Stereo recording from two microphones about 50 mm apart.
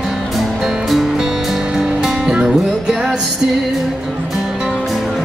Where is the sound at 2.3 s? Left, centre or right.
Centre.